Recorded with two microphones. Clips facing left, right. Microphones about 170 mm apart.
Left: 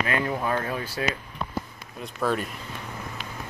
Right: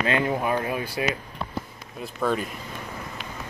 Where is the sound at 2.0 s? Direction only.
Centre (ahead or behind).